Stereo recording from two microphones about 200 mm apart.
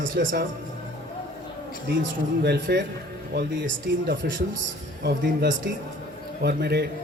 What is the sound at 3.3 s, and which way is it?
A man's voice, 65° right (ahead or behind).